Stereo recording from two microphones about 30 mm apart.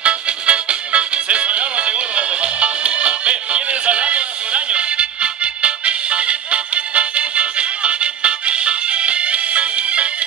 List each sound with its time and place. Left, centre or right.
0.0 s music: right